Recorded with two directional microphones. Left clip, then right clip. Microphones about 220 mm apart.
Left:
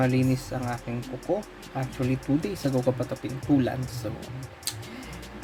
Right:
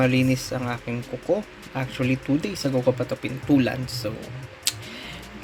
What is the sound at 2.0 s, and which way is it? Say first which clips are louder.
Speech: right 3 dB; centre (ahead or behind).